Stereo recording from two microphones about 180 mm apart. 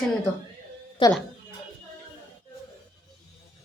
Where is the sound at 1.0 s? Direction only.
25° left (ahead or behind).